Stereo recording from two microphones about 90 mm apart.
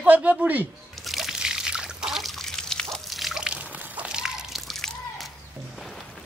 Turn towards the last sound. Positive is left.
turn(degrees=5)  # may be behind; listen again after turning